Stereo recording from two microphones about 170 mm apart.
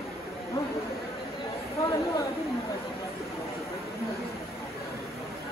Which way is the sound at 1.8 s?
20° left (ahead or behind).